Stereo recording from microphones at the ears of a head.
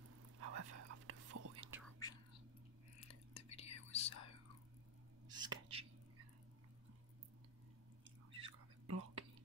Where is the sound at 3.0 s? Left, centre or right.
Left.